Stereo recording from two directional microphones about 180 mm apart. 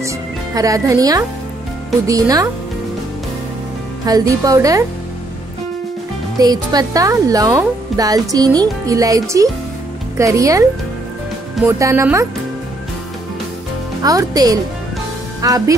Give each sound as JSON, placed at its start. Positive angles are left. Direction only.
{"t": 0.6, "sound": "speech", "side_deg": -20}
{"t": 4.0, "sound": "speech", "side_deg": -20}
{"t": 6.3, "sound": "speech", "side_deg": -20}
{"t": 11.6, "sound": "speech", "side_deg": -15}
{"t": 14.0, "sound": "speech", "side_deg": -20}